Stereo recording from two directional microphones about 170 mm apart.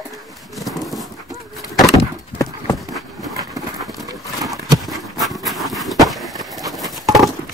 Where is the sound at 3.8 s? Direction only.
Centre (ahead or behind).